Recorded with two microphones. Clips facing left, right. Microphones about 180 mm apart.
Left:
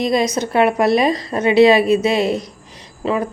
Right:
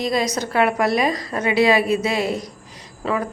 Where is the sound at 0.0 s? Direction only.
20° left (ahead or behind).